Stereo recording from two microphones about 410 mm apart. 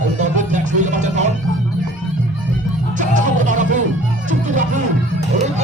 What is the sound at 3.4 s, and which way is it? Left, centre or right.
Music, centre.